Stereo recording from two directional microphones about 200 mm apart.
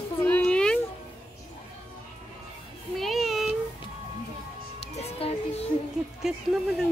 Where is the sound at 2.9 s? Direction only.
Centre (ahead or behind).